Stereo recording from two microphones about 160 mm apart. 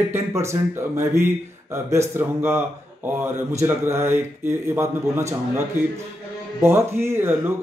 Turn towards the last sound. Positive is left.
turn(degrees=-15)  # may be behind; listen again after turning